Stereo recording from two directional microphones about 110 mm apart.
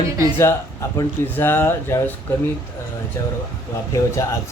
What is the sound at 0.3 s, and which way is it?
Speech, 25° left (ahead or behind).